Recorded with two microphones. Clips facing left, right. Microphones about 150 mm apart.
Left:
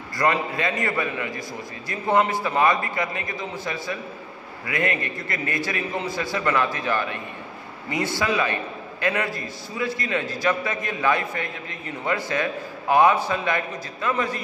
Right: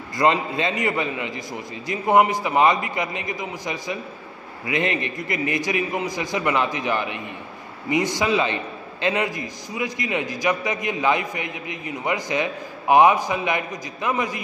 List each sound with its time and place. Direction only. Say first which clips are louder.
0.2 s a man's voice: right 3 dB; 25° right (ahead or behind)